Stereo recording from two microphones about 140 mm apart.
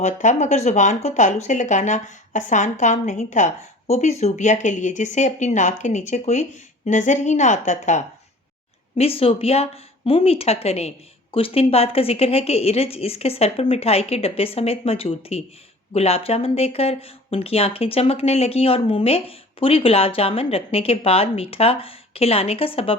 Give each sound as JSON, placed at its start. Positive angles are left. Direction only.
{"t": 0.0, "sound": "speech", "side_deg": 60}
{"t": 9.0, "sound": "speech", "side_deg": 45}